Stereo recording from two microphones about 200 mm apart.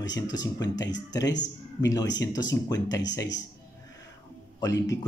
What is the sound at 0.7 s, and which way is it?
Speech, 60° left (ahead or behind).